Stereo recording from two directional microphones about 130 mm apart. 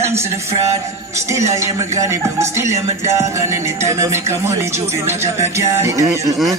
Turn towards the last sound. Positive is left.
turn(degrees=-25)  # may be behind; listen again after turning